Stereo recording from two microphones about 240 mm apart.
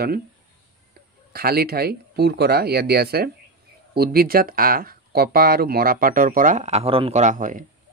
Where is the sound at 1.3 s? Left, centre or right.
Right.